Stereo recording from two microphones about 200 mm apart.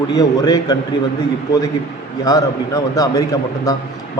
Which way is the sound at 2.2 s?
20° left (ahead or behind).